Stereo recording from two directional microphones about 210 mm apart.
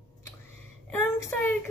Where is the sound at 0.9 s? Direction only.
10° left (ahead or behind).